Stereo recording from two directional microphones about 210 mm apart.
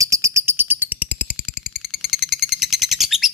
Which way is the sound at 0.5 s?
10° right (ahead or behind).